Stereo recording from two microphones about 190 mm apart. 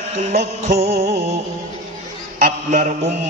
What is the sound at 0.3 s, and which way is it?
Music, 35° right (ahead or behind).